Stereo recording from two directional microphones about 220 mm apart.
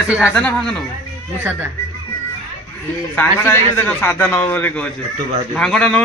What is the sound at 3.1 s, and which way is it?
A man's voice, 10° left (ahead or behind).